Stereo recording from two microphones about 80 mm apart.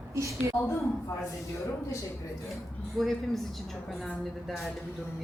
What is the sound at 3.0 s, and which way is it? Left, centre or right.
Speech, centre.